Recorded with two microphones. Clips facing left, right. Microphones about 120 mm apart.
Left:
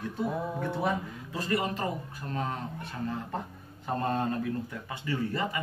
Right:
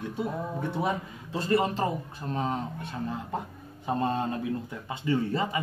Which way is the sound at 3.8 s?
20° right (ahead or behind).